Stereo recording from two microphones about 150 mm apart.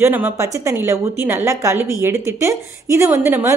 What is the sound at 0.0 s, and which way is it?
A woman's voice, 15° right (ahead or behind).